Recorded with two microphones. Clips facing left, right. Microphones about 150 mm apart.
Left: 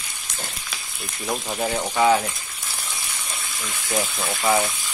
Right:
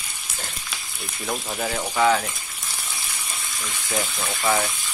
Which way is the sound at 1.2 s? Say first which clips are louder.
Left 2 dB; 15° left (ahead or behind).